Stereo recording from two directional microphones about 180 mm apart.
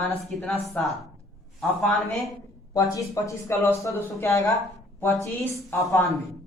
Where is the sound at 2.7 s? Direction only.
20° left (ahead or behind).